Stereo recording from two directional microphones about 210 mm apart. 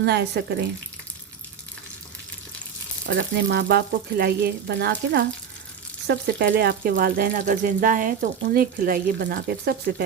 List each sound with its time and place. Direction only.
0.0 s speech: 55° right (ahead or behind)
3.1 s speech: 55° right (ahead or behind)